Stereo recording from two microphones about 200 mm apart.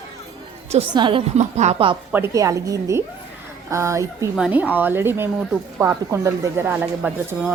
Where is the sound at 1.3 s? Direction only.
35° right (ahead or behind).